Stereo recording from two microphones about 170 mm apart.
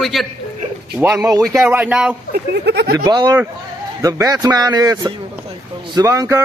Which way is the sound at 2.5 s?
75° right (ahead or behind).